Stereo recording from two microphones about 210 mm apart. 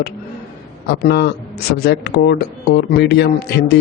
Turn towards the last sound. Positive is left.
turn(degrees=50)  # may be behind; listen again after turning